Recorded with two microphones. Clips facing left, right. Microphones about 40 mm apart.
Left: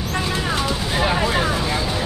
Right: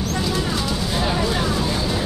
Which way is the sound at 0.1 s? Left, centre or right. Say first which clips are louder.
Left 3 dB; left.